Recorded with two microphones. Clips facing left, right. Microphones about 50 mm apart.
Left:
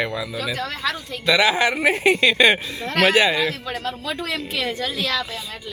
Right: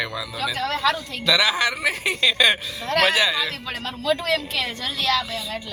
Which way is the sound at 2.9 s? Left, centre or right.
Centre.